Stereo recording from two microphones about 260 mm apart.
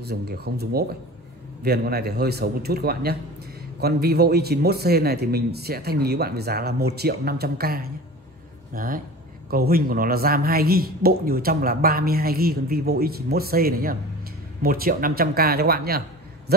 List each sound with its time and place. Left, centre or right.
0.0 s a woman's voice: right